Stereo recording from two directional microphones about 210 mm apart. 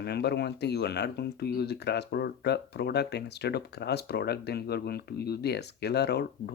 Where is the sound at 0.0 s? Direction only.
50° left (ahead or behind).